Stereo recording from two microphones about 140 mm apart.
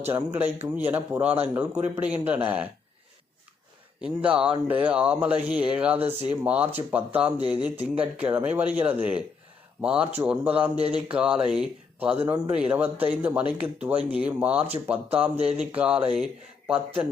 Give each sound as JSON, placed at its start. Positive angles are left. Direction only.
{"t": 0.1, "sound": "speech", "side_deg": -15}
{"t": 4.0, "sound": "speech", "side_deg": -10}
{"t": 10.8, "sound": "a sound", "side_deg": -45}
{"t": 11.1, "sound": "speech", "side_deg": -10}